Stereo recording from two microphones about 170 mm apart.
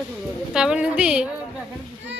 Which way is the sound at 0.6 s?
5° right (ahead or behind).